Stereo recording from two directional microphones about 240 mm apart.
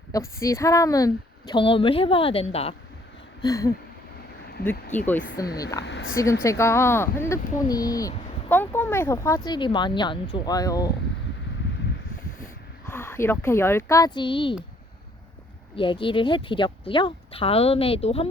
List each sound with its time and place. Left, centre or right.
0.1 s speech: centre
3.4 s speech: centre
4.9 s speech: centre
5.8 s a woman's voice: left
6.4 s speech: centre
12.9 s speech: centre
15.7 s speech: left